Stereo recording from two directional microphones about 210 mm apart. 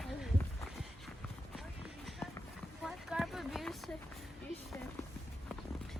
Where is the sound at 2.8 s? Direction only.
Centre (ahead or behind).